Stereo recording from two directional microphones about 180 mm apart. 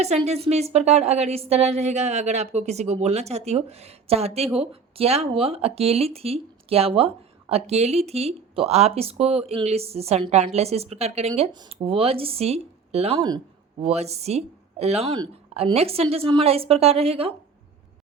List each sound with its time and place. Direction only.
0.0 s a woman's voice: 35° right (ahead or behind)